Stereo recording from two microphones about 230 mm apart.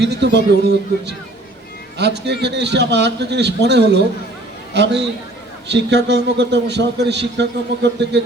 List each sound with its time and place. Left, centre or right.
0.0 s a man's voice: right